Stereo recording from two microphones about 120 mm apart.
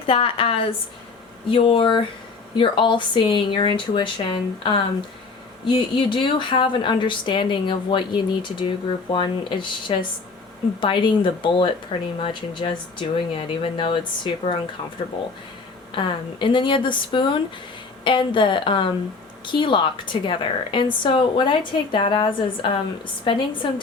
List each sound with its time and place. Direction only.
0.0 s speech: 50° left (ahead or behind)
16.0 s speech: 45° left (ahead or behind)